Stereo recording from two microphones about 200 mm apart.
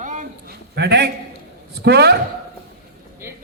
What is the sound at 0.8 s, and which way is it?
A man's voice, 55° right (ahead or behind).